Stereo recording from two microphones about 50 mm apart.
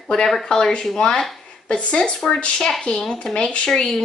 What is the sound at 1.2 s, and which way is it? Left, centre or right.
Speech, centre.